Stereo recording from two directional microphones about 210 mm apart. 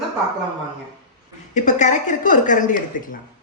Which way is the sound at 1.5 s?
35° left (ahead or behind).